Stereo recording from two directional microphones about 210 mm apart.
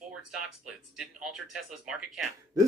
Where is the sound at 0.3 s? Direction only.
5° right (ahead or behind).